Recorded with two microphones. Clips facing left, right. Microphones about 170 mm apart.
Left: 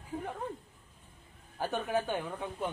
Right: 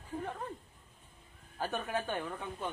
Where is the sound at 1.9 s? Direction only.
10° left (ahead or behind).